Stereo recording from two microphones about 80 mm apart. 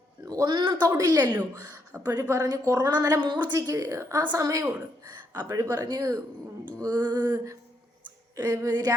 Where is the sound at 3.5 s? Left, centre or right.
Right.